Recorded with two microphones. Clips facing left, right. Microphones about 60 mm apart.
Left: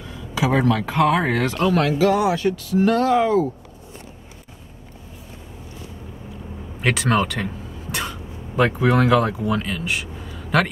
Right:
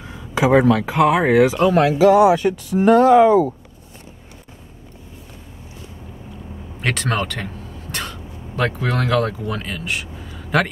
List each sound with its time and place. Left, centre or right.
0.0 s a sound: right
0.6 s speech: centre
6.8 s speech: centre